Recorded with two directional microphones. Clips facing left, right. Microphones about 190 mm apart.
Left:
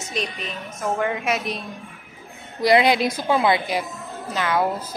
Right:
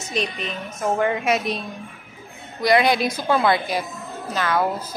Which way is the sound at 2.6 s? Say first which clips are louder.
Left 1 dB; 25° left (ahead or behind).